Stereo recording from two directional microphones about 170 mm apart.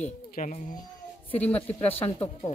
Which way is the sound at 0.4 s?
50° left (ahead or behind).